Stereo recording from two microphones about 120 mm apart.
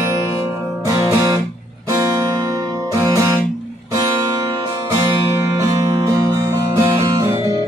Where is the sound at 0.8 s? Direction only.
30° right (ahead or behind).